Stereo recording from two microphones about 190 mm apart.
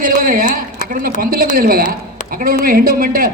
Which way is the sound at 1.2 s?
50° right (ahead or behind).